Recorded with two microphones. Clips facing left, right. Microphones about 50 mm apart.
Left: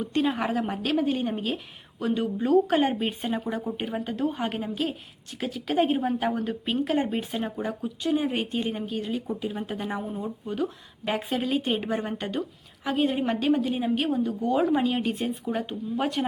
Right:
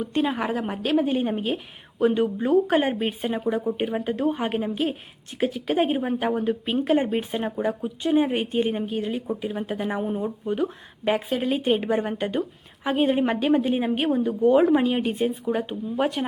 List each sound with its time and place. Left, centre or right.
0.2 s a woman's voice: centre; by 8.3 s right
8.3 s a woman's voice: centre
10.0 s speech: right
10.2 s a woman's voice: centre